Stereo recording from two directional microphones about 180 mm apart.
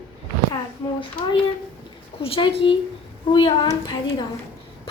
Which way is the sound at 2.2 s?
30° left (ahead or behind).